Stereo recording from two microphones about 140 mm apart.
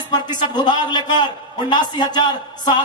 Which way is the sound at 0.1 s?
30° left (ahead or behind).